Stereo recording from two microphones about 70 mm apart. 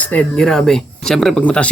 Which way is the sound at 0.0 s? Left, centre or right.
Centre.